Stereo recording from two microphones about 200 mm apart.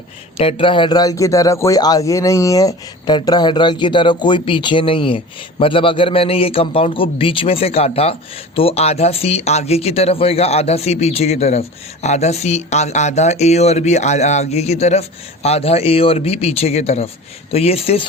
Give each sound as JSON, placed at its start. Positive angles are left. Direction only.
{"t": 0.3, "sound": "a man's voice", "side_deg": 25}